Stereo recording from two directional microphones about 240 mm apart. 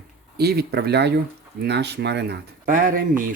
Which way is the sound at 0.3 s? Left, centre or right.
Right.